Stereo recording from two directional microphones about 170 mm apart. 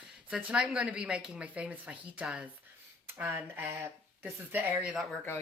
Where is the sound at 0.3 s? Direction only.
5° right (ahead or behind).